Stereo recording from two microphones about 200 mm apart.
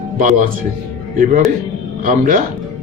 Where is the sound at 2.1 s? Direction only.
40° right (ahead or behind).